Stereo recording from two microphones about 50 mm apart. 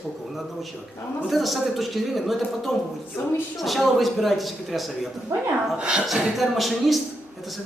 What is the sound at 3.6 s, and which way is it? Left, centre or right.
A man's voice, centre.